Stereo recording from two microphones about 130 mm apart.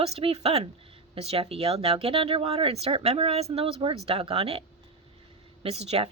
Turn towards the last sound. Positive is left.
turn(degrees=-50)  # may be behind; listen again after turning